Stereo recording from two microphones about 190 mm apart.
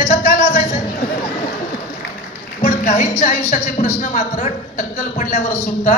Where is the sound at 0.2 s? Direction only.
40° left (ahead or behind).